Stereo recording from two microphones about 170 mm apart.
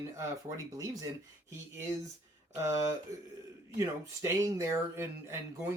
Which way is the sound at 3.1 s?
20° right (ahead or behind).